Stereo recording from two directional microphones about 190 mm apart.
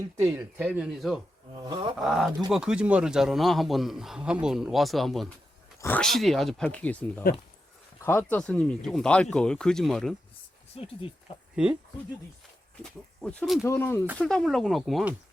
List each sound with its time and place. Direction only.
0.3 s speech: 15° right (ahead or behind)
1.5 s a sound: 20° right (ahead or behind)
2.0 s a man's voice: centre (ahead or behind)
8.0 s a man's voice: 10° left (ahead or behind)
10.8 s speech: 30° left (ahead or behind)
11.5 s a man's voice: 5° right (ahead or behind)
12.8 s a man's voice: 5° left (ahead or behind)
13.7 s a man's voice: 10° left (ahead or behind)